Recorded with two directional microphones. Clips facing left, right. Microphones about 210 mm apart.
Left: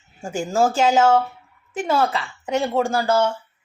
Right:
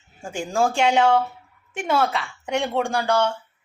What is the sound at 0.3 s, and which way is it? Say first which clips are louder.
Speech: left 3 dB; 5° left (ahead or behind).